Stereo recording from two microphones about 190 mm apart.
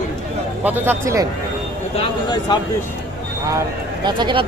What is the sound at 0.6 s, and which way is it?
Speech, 10° right (ahead or behind).